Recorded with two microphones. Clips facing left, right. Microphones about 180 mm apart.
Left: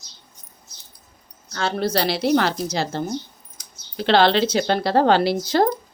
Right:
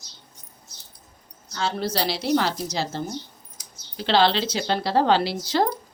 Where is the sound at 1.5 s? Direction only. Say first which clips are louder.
Left 4 dB; 60° left (ahead or behind).